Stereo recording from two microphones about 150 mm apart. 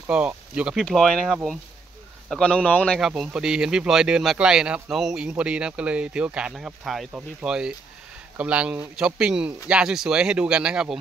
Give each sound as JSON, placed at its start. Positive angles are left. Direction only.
{"t": 0.0, "sound": "speech", "side_deg": -10}